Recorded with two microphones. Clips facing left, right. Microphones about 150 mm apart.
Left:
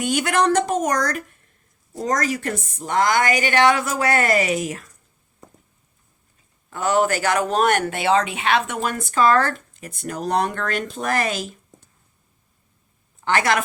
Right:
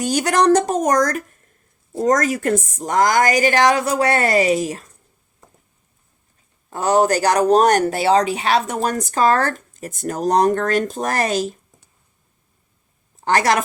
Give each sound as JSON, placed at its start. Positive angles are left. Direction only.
{"t": 0.0, "sound": "speech", "side_deg": -40}
{"t": 6.7, "sound": "speech", "side_deg": -35}
{"t": 13.1, "sound": "a woman's voice", "side_deg": -40}